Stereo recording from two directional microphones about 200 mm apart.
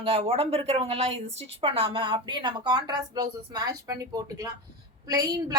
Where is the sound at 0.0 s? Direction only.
30° right (ahead or behind).